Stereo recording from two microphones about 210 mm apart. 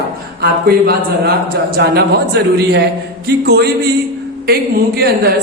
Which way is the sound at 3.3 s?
50° right (ahead or behind).